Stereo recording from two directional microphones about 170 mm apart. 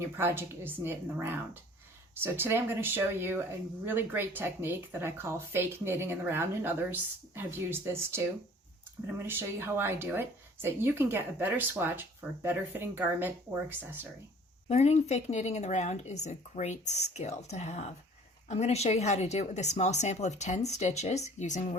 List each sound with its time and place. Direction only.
0.0 s speech: 15° right (ahead or behind)
14.7 s speech: 40° left (ahead or behind)